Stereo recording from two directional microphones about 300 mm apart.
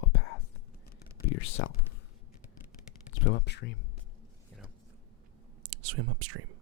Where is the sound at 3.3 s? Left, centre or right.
Left.